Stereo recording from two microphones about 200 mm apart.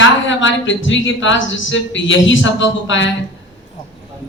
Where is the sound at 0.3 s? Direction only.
70° left (ahead or behind).